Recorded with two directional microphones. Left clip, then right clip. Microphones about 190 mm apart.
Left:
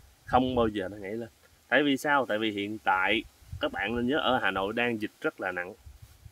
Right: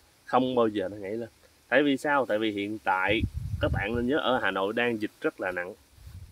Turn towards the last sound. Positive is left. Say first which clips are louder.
# right 1 dB
turn(degrees=-10)  # may be behind; listen again after turning